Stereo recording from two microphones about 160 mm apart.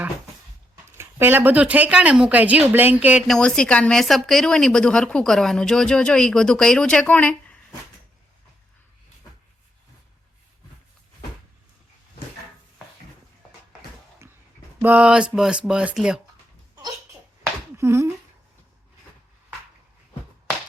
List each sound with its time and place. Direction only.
0.9 s a woman's voice: 15° right (ahead or behind); by 7.5 s 10° left (ahead or behind)
14.2 s a sound: 15° right (ahead or behind)
14.8 s a woman's voice: 10° right (ahead or behind)
17.7 s speech: 15° right (ahead or behind)